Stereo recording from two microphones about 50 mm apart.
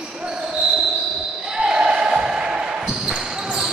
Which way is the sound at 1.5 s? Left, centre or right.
Centre.